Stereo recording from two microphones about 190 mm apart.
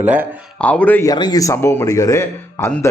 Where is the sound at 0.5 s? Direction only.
5° left (ahead or behind).